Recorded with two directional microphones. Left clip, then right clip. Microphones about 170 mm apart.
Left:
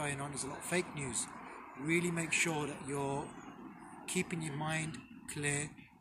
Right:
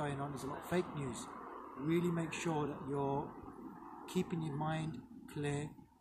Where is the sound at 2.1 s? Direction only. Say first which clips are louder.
Left 4 dB; centre (ahead or behind).